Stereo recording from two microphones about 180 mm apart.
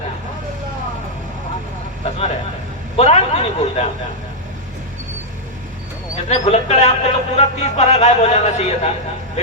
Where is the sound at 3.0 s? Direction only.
35° left (ahead or behind).